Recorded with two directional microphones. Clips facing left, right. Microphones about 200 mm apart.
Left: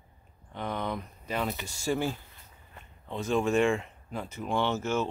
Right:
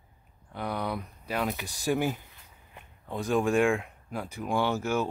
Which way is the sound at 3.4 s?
10° right (ahead or behind).